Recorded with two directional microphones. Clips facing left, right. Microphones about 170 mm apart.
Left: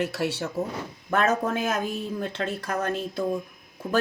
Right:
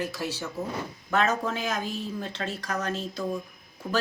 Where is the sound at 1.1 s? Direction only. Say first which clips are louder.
Left 2 dB; 50° left (ahead or behind).